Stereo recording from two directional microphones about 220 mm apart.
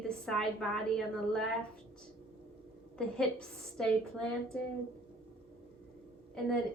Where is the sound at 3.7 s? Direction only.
5° left (ahead or behind).